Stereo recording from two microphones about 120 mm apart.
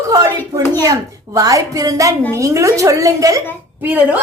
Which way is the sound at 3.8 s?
15° right (ahead or behind).